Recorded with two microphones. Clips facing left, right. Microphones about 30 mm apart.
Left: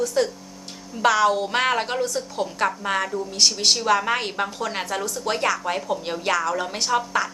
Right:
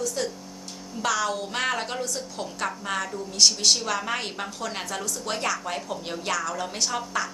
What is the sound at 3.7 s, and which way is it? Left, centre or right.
A woman's voice, centre.